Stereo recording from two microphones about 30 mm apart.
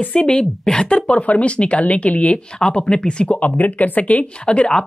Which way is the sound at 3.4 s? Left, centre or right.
Left.